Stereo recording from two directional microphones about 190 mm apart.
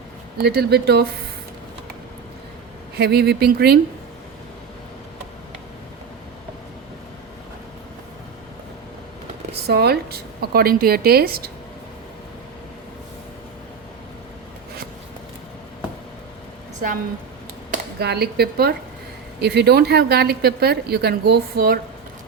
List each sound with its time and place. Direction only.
0.3 s speech: 55° right (ahead or behind)
2.9 s speech: 55° right (ahead or behind)
9.6 s a woman's voice: 55° right (ahead or behind)
18.0 s speech: 55° right (ahead or behind)